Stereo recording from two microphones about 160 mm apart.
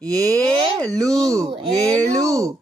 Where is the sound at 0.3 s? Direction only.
5° left (ahead or behind).